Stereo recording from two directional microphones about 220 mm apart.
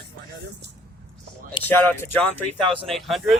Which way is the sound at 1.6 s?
10° left (ahead or behind).